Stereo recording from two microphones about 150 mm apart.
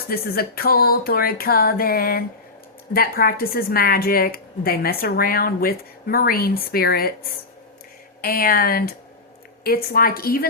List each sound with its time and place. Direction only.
0.1 s a woman's voice: 90° left
8.2 s a woman's voice: 80° left